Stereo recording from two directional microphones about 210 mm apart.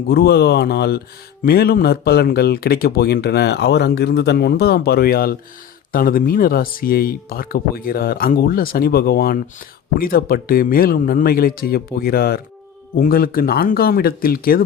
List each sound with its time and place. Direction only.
0.1 s speech: 50° left (ahead or behind)